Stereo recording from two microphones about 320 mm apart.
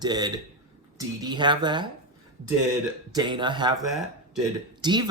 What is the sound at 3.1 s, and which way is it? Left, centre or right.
Speech, centre.